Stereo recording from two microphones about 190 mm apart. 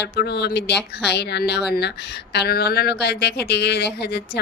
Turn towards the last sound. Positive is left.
turn(degrees=60)  # may be behind; listen again after turning